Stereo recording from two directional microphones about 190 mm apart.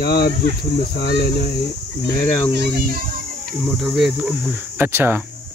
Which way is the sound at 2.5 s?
55° right (ahead or behind).